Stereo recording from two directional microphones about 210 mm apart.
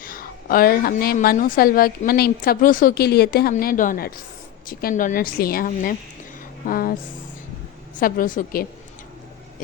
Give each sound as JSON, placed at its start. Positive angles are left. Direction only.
{"t": 0.0, "sound": "a woman's voice", "side_deg": 40}
{"t": 7.9, "sound": "a woman's voice", "side_deg": 40}